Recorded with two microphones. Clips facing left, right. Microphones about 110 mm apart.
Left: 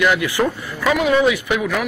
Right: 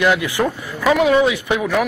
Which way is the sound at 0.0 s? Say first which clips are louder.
Even; 25° right (ahead or behind).